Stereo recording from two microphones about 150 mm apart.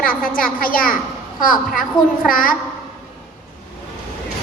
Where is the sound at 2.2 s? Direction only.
70° left (ahead or behind).